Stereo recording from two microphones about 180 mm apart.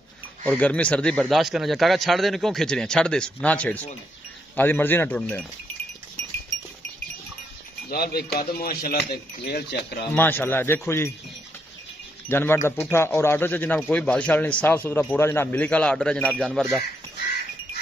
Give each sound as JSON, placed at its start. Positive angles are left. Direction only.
{"t": 0.5, "sound": "a man's voice", "side_deg": 5}
{"t": 7.9, "sound": "speech", "side_deg": 60}
{"t": 10.1, "sound": "a man's voice", "side_deg": 10}
{"t": 12.3, "sound": "a man's voice", "side_deg": 15}